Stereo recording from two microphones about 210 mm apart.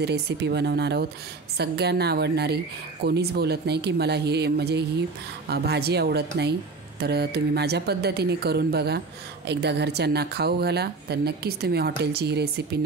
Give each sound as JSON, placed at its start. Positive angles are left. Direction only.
{"t": 0.0, "sound": "a woman's voice", "side_deg": -50}